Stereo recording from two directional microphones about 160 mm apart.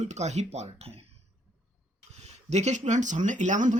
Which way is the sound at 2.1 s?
45° right (ahead or behind).